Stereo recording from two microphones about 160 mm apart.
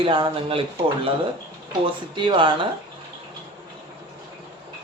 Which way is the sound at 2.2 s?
30° right (ahead or behind).